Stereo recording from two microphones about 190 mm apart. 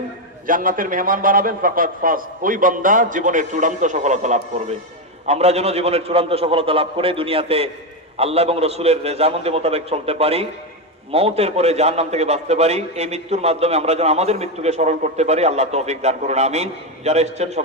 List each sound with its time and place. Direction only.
0.4 s a man's voice: 45° right (ahead or behind)